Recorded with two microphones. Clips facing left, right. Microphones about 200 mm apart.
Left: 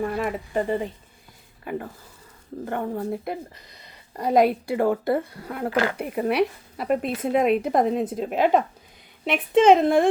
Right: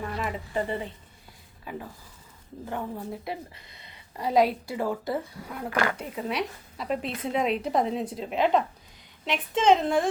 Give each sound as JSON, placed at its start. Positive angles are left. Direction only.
{"t": 0.1, "sound": "speech", "side_deg": 50}
{"t": 2.6, "sound": "speech", "side_deg": 60}
{"t": 3.5, "sound": "speech", "side_deg": 40}